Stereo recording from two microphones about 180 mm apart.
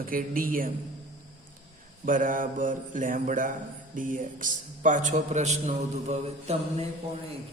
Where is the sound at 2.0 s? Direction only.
50° right (ahead or behind).